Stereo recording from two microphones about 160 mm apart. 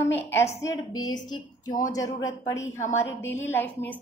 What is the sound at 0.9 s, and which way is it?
A woman's voice, 25° left (ahead or behind).